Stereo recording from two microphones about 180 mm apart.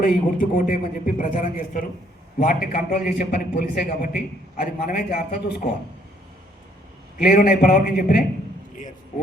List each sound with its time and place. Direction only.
0.0 s a man's voice: 50° left (ahead or behind)
7.2 s a man's voice: 55° left (ahead or behind)